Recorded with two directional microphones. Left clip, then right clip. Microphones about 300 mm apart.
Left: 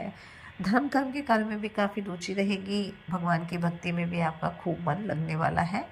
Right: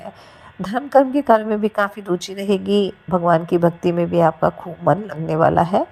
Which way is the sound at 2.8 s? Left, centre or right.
Right.